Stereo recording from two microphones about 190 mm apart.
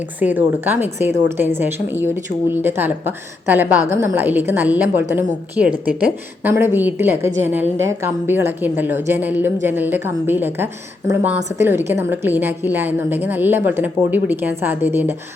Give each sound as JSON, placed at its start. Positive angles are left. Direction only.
{"t": 0.2, "sound": "a woman's voice", "side_deg": -10}